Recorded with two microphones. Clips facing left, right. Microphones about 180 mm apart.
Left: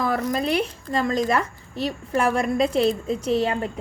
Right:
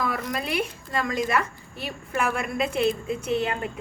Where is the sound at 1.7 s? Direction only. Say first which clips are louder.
Left 7 dB; 30° left (ahead or behind).